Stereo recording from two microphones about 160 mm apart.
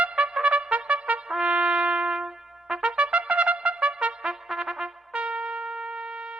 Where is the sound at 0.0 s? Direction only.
10° right (ahead or behind).